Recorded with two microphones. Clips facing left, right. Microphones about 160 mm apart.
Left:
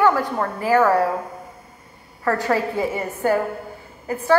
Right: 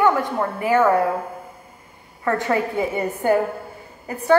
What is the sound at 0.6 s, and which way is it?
Speech, 20° right (ahead or behind).